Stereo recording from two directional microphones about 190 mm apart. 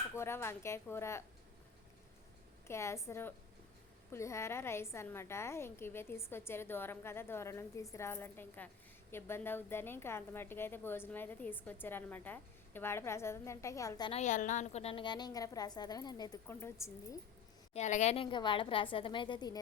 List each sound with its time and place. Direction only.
0.1 s a woman's voice: 15° left (ahead or behind)
2.6 s a woman's voice: 15° left (ahead or behind)
14.1 s a woman's voice: 40° left (ahead or behind); by 17.2 s 15° left (ahead or behind)
17.7 s a woman's voice: 40° left (ahead or behind)